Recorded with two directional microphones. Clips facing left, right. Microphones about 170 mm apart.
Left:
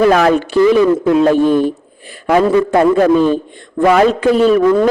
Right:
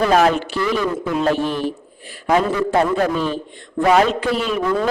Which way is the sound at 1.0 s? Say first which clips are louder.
Left 9 dB; 50° left (ahead or behind).